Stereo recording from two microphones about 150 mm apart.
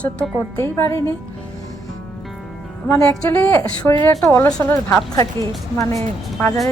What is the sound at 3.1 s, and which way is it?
A woman's voice, 15° left (ahead or behind).